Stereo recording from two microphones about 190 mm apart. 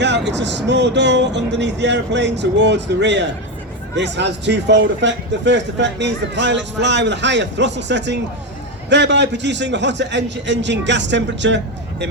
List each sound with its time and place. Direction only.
0.0 s speech: 65° right (ahead or behind)